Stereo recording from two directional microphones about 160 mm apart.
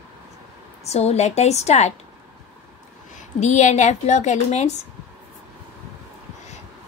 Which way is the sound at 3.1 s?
45° left (ahead or behind).